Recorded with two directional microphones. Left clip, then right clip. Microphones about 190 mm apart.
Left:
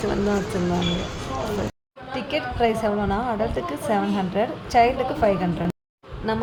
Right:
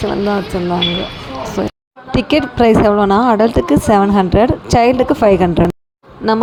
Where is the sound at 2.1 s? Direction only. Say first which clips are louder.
Right 11 dB; 40° right (ahead or behind).